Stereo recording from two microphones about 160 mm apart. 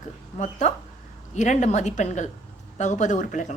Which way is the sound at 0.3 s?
50° left (ahead or behind).